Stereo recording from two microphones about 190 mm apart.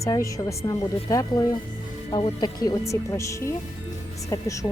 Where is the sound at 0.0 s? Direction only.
15° left (ahead or behind).